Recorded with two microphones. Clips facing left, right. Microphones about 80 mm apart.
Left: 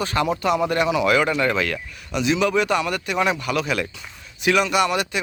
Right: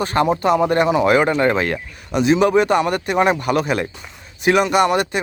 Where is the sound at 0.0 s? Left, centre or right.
Right.